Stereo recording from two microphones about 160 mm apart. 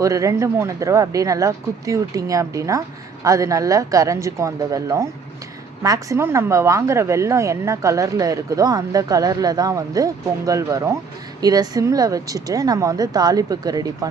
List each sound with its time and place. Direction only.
0.0 s speech: 20° right (ahead or behind)